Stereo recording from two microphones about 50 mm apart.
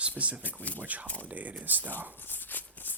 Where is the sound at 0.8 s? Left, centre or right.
Right.